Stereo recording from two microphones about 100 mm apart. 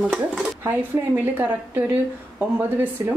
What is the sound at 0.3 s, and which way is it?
Speech, 10° right (ahead or behind).